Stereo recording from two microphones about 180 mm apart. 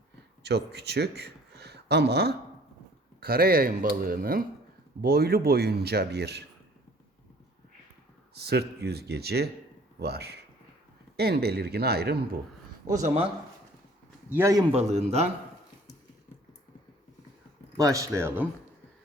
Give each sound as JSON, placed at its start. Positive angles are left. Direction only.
{"t": 0.4, "sound": "speech", "side_deg": -65}
{"t": 8.4, "sound": "speech", "side_deg": -65}
{"t": 14.3, "sound": "a man's voice", "side_deg": -15}
{"t": 14.7, "sound": "a man's voice", "side_deg": -35}
{"t": 17.7, "sound": "speech", "side_deg": -20}